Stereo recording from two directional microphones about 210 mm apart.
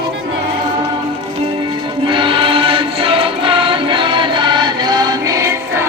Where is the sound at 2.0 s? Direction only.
25° right (ahead or behind).